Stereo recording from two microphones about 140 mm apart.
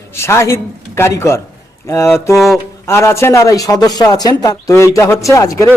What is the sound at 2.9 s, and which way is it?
A man's voice, 20° left (ahead or behind).